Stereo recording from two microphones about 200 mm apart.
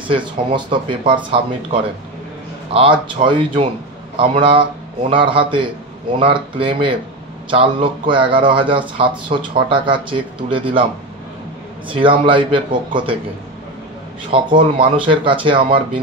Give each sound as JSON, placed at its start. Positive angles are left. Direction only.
{"t": 0.1, "sound": "speech", "side_deg": -25}
{"t": 11.9, "sound": "speech", "side_deg": -25}
{"t": 14.3, "sound": "speech", "side_deg": -25}